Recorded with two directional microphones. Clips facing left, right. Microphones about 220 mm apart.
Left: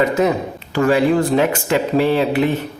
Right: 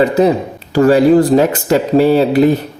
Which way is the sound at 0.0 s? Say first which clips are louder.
Right 5 dB; 35° right (ahead or behind).